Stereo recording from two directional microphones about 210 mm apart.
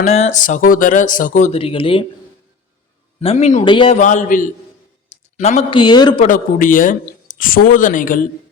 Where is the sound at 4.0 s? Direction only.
35° left (ahead or behind); by 6.2 s 20° left (ahead or behind).